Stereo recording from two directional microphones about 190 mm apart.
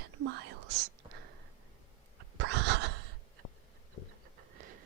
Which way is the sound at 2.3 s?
70° right (ahead or behind).